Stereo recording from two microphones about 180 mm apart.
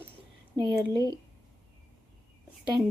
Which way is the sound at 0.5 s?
25° right (ahead or behind).